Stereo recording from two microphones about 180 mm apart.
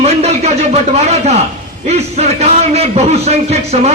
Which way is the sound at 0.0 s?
35° right (ahead or behind).